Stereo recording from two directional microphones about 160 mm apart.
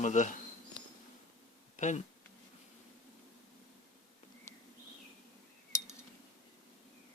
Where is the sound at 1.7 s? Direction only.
50° left (ahead or behind).